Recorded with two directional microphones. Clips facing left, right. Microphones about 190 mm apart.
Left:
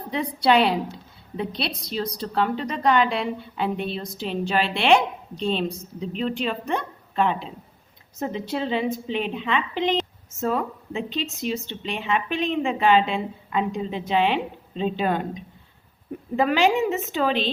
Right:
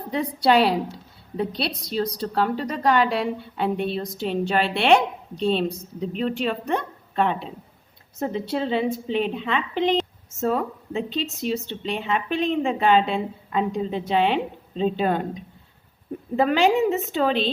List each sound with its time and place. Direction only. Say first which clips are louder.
0.1 s a woman's voice: right 1 dB; 45° right (ahead or behind)
8.2 s a woman's voice: right 2 dB; 40° right (ahead or behind)
16.3 s a woman's voice: right 1 dB; 40° right (ahead or behind)